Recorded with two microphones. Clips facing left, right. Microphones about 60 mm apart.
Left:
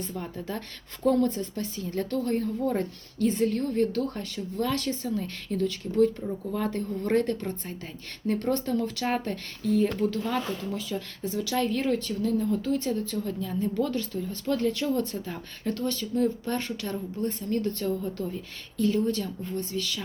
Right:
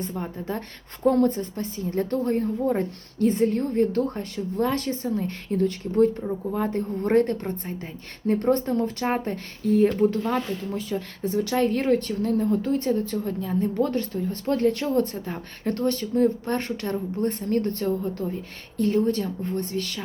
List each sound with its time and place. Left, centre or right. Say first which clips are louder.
0.0 s a woman's voice: right 4 dB; right